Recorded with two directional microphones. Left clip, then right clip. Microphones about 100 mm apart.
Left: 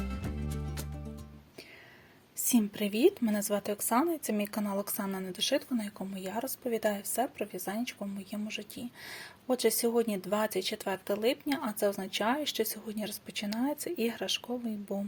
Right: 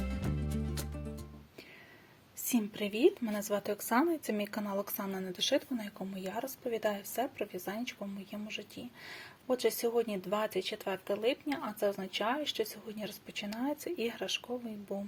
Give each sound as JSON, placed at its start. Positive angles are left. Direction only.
{"t": 0.0, "sound": "music", "side_deg": 0}
{"t": 2.5, "sound": "speech", "side_deg": 25}